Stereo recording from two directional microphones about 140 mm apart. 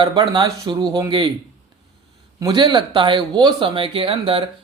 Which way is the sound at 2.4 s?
30° right (ahead or behind).